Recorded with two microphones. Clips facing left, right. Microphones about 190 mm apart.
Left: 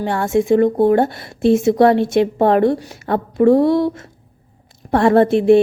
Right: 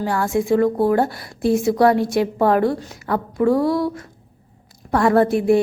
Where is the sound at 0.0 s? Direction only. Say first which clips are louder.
Left 3 dB; 25° left (ahead or behind).